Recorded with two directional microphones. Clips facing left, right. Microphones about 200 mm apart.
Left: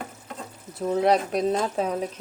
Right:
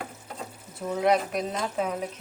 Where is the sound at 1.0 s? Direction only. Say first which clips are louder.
Left 2 dB; 35° left (ahead or behind).